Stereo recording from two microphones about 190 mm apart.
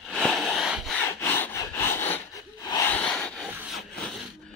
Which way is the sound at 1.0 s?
10° left (ahead or behind).